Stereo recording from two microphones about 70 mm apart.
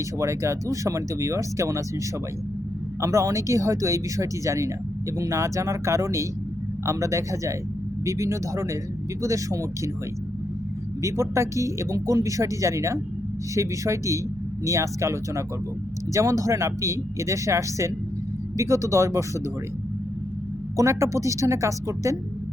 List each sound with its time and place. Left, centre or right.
0.2 s speech: right
3.0 s speech: right
11.0 s speech: right
20.7 s speech: right